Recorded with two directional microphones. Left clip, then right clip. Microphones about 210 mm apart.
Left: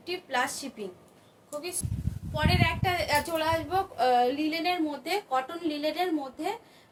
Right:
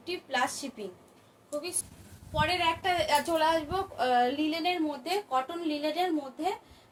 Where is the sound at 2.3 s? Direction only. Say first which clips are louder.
Even; 20° left (ahead or behind).